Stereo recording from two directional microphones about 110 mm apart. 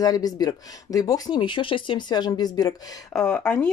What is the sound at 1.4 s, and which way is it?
Speech, 50° left (ahead or behind).